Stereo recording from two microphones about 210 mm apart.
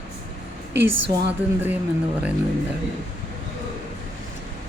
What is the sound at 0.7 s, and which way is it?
Speech, 55° right (ahead or behind).